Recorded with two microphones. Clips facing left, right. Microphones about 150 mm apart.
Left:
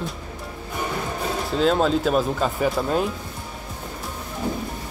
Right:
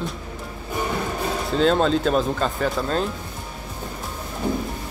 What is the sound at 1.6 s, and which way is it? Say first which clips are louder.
Speech: right 1 dB; 5° left (ahead or behind).